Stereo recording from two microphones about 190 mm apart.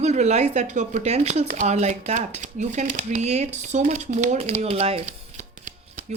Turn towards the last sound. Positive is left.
turn(degrees=-40)  # may be behind; listen again after turning